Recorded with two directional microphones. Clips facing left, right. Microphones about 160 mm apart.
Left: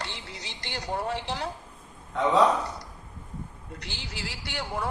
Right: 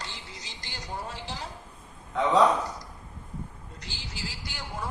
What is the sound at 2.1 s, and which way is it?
Speech, centre (ahead or behind).